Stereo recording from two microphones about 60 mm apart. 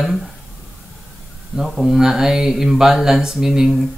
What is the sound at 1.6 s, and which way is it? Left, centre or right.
Speech, centre.